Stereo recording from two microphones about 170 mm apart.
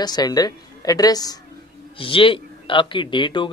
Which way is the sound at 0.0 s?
25° left (ahead or behind).